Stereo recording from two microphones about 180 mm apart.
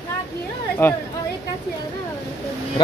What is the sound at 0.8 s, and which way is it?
Speech, 15° left (ahead or behind).